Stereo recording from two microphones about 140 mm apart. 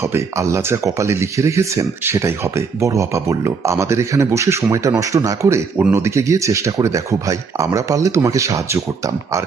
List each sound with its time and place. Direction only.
0.1 s speech: 20° right (ahead or behind)